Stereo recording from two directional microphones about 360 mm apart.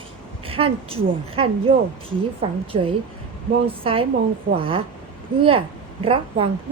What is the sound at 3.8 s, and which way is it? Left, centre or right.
A woman's voice, centre.